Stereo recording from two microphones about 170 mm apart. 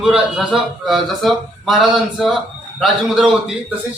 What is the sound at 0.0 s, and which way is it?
Speech, centre (ahead or behind).